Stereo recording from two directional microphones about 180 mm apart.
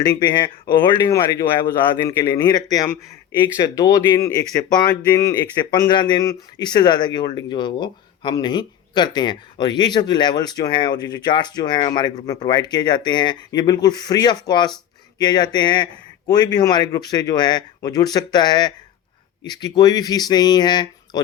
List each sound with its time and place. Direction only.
0.0 s speech: 25° left (ahead or behind)